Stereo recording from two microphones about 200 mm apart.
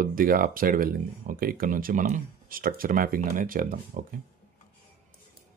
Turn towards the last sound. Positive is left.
turn(degrees=-45)  # may be behind; listen again after turning